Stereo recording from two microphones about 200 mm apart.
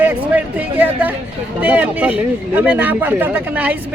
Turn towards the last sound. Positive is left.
turn(degrees=-10)  # may be behind; listen again after turning